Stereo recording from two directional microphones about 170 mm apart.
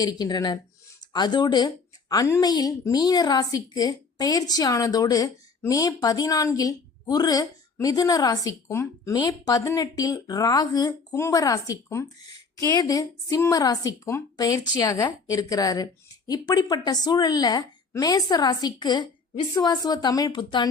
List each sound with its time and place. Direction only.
0.0 s speech: 25° left (ahead or behind)